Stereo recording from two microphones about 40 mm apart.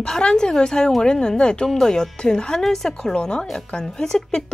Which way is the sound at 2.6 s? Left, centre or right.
Centre.